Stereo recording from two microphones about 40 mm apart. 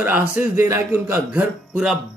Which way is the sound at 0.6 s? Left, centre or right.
Right.